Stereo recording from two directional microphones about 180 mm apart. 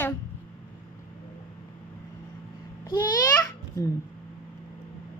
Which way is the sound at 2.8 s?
25° left (ahead or behind).